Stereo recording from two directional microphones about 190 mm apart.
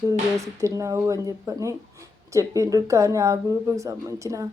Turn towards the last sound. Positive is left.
turn(degrees=-15)  # may be behind; listen again after turning